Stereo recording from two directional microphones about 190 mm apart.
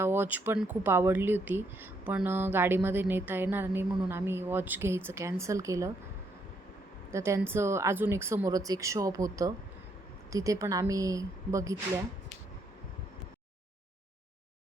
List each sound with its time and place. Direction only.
0.0 s speech: 10° right (ahead or behind)
7.1 s speech: 15° right (ahead or behind)